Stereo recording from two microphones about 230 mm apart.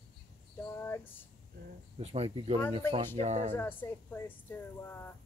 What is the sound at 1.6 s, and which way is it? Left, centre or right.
Speech, right.